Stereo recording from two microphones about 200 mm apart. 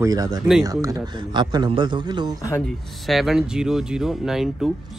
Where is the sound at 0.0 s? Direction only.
15° right (ahead or behind).